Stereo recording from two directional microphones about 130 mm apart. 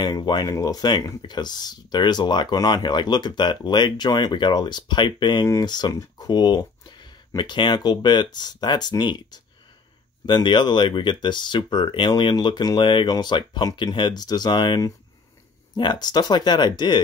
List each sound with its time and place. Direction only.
0.0 s speech: 35° left (ahead or behind)